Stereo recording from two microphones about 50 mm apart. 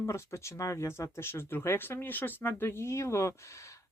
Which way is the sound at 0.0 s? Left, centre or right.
Left.